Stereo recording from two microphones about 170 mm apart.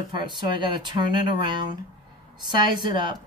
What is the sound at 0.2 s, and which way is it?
Speech, 25° right (ahead or behind).